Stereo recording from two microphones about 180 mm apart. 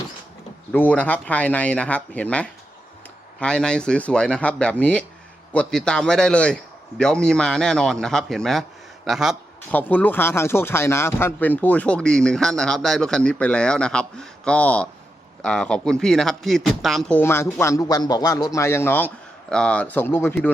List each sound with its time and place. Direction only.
0.7 s a man's voice: 10° left (ahead or behind)
9.7 s a man's voice: 10° left (ahead or behind)
17.2 s speech: 15° left (ahead or behind)